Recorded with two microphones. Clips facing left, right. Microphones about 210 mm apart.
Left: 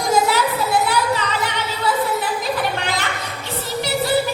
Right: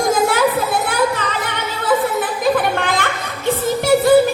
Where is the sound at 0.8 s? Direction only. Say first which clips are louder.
Right 2 dB; 50° right (ahead or behind).